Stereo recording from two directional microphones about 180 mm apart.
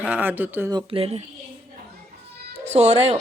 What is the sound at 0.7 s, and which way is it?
Speech, 30° right (ahead or behind).